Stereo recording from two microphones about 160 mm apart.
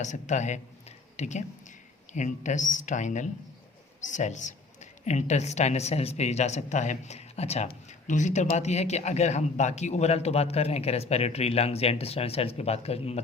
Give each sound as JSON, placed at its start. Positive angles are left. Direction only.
{"t": 0.0, "sound": "a woman's voice", "side_deg": 50}